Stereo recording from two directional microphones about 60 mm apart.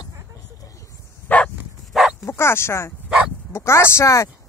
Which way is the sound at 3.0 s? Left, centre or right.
Centre.